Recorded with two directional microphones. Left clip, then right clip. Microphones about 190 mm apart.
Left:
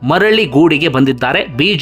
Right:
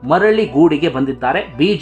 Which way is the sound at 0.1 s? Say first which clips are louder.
Left 2 dB; 20° left (ahead or behind).